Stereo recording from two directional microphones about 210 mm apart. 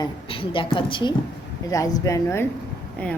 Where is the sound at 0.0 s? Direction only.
25° left (ahead or behind).